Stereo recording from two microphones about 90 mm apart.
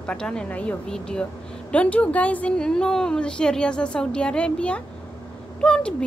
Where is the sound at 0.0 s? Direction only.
10° left (ahead or behind).